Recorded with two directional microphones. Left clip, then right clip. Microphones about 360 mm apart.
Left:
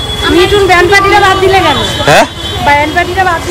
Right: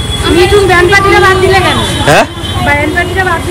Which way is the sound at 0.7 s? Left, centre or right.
Left.